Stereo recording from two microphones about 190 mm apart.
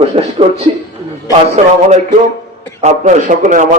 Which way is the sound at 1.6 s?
35° right (ahead or behind).